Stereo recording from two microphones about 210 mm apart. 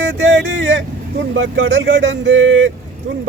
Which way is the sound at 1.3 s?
60° right (ahead or behind).